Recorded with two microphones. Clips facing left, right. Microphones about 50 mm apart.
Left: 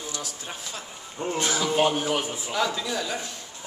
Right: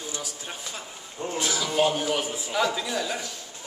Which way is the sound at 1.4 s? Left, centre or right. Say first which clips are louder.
Left 1 dB; left.